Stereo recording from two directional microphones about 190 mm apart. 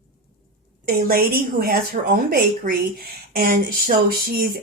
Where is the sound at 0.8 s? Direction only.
50° right (ahead or behind).